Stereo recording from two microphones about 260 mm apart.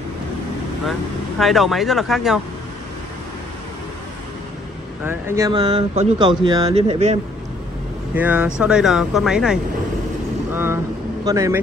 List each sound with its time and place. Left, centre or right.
1.4 s speech: centre
5.0 s speech: centre
8.1 s speech: centre